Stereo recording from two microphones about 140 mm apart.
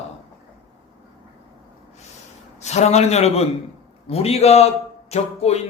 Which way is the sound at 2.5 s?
50° left (ahead or behind).